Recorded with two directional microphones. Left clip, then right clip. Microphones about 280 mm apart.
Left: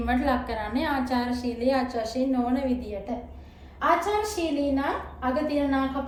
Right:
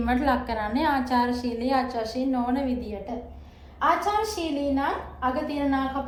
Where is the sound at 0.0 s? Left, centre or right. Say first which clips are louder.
Right 1 dB; centre.